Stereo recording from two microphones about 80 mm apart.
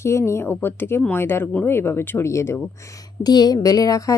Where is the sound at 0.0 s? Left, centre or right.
Left.